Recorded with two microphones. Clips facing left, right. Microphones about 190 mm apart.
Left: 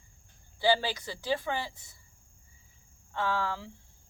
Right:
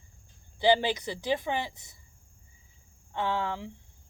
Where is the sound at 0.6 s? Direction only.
20° right (ahead or behind).